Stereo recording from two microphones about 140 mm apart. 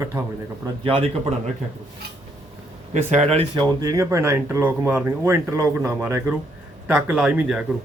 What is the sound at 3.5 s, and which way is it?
Speech, 30° right (ahead or behind).